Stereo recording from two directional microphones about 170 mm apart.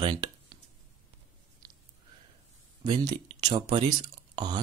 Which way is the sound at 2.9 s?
25° right (ahead or behind).